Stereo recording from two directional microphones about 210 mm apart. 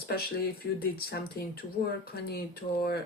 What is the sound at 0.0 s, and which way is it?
Speech, 45° left (ahead or behind).